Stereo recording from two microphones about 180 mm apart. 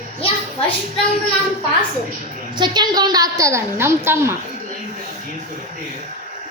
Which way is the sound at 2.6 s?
25° right (ahead or behind).